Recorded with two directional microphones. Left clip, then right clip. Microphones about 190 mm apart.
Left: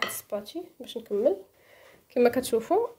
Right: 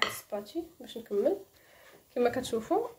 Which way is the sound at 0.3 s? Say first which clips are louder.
Left 3 dB; 45° left (ahead or behind).